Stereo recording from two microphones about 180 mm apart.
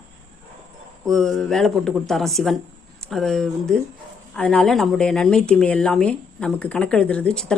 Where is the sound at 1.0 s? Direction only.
Centre (ahead or behind).